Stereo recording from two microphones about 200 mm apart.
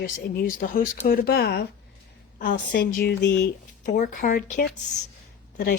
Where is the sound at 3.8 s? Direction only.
40° left (ahead or behind).